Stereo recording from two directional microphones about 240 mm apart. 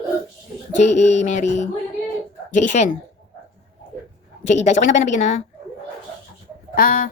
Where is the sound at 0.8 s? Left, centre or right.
Left.